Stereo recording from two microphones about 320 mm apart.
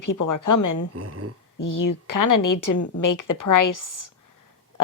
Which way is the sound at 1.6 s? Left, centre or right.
Left.